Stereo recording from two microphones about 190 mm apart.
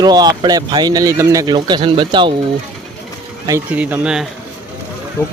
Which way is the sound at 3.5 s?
10° right (ahead or behind).